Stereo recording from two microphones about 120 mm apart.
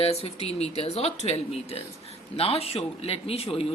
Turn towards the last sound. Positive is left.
turn(degrees=55)  # may be behind; listen again after turning